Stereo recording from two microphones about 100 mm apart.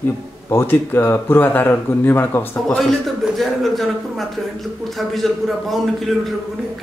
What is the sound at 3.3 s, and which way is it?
Speech, centre (ahead or behind).